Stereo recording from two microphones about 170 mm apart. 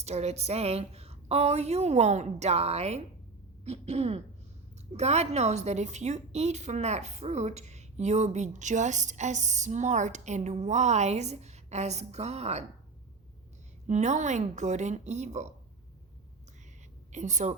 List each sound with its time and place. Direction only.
0.0 s a woman's voice: 40° right (ahead or behind)
13.8 s a woman's voice: 45° right (ahead or behind)
17.1 s a woman's voice: 45° right (ahead or behind)